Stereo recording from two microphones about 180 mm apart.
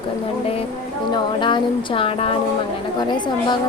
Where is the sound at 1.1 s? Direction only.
25° left (ahead or behind).